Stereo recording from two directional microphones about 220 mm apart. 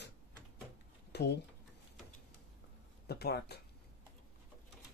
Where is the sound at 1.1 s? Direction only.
50° left (ahead or behind).